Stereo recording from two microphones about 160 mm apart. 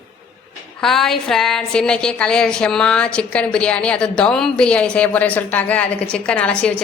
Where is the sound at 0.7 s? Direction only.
Centre (ahead or behind).